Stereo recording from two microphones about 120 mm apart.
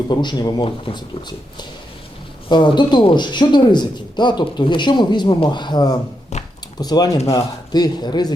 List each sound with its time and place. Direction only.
0.1 s speech: 40° left (ahead or behind)
2.5 s speech: 40° left (ahead or behind)
6.3 s a sound: 70° left (ahead or behind)
6.7 s speech: 35° left (ahead or behind)